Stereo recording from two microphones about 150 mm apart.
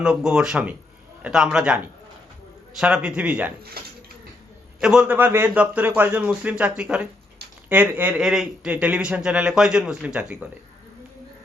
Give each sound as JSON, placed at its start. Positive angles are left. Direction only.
{"t": 0.0, "sound": "speech", "side_deg": -5}
{"t": 3.8, "sound": "dishes", "side_deg": -90}
{"t": 4.8, "sound": "speech", "side_deg": -5}